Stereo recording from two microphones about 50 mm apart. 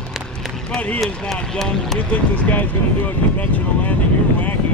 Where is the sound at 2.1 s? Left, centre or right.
Left.